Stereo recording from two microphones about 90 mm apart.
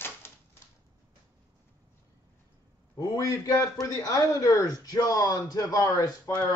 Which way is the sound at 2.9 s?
45° left (ahead or behind).